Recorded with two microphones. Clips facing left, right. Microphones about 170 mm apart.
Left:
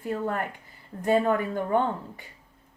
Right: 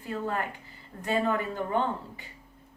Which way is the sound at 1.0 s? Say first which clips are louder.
Left 5 dB; 50° left (ahead or behind).